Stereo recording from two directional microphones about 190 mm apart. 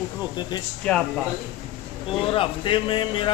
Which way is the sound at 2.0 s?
30° left (ahead or behind).